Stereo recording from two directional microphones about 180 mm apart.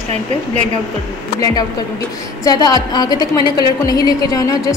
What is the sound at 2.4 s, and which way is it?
A woman's voice, 20° left (ahead or behind).